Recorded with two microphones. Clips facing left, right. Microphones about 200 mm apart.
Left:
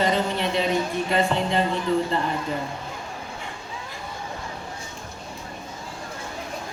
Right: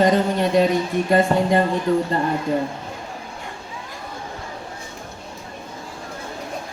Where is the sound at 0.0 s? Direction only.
45° right (ahead or behind).